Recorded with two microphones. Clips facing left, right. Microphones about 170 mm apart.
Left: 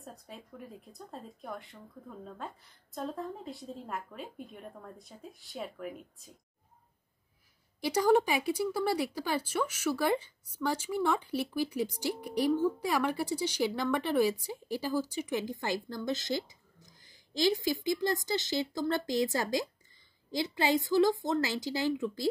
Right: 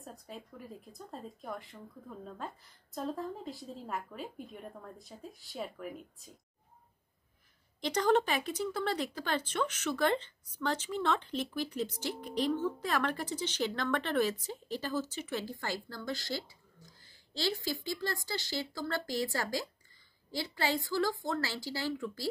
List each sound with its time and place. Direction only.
0.0 s speech: centre (ahead or behind)
7.8 s a woman's voice: 10° left (ahead or behind)